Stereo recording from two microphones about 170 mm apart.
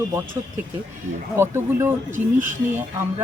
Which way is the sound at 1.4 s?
15° right (ahead or behind).